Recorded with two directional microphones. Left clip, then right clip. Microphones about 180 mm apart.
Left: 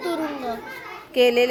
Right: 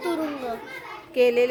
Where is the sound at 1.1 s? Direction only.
10° left (ahead or behind).